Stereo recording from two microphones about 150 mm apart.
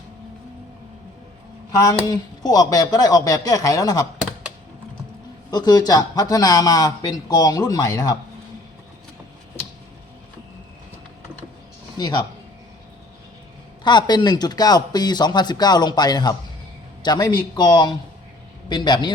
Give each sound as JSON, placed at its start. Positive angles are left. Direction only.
{"t": 1.7, "sound": "speech", "side_deg": 20}
{"t": 5.5, "sound": "speech", "side_deg": 25}
{"t": 11.9, "sound": "speech", "side_deg": 30}
{"t": 13.8, "sound": "a man's voice", "side_deg": 30}